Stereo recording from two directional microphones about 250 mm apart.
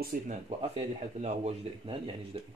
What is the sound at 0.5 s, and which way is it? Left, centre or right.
Speech, right.